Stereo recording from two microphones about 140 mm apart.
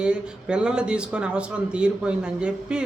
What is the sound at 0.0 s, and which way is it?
A man's voice, 5° right (ahead or behind).